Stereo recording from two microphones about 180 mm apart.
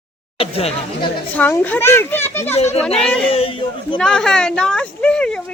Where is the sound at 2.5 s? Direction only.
35° left (ahead or behind).